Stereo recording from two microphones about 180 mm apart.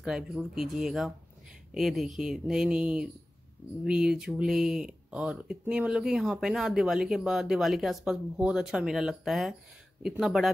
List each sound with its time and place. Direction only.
0.0 s speech: 5° right (ahead or behind)